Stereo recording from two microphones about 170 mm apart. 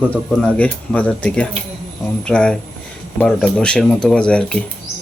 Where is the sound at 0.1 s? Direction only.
10° left (ahead or behind).